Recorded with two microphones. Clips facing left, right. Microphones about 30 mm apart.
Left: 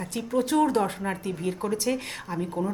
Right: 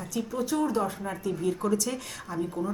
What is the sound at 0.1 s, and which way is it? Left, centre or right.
Speech, left.